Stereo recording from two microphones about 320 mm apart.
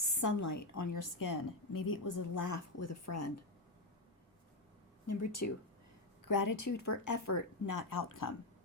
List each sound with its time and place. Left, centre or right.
0.2 s a woman's voice: left
5.0 s speech: left
6.2 s speech: left